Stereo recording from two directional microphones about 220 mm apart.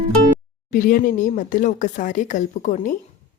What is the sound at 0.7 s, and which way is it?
A woman's voice, 40° left (ahead or behind).